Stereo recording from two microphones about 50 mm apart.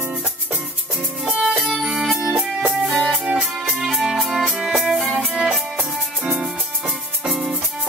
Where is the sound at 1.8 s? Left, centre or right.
Centre.